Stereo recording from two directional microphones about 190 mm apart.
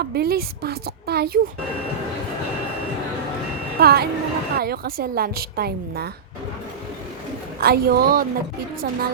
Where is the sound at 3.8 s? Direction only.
55° right (ahead or behind).